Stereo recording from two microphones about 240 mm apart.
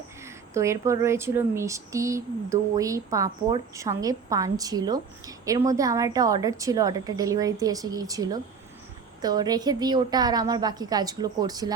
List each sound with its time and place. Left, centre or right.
0.3 s speech: centre